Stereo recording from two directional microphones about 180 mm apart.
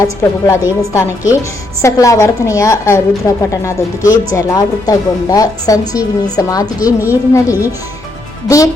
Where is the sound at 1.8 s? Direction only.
15° left (ahead or behind).